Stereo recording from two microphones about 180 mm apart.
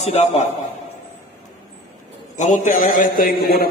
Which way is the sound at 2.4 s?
45° left (ahead or behind).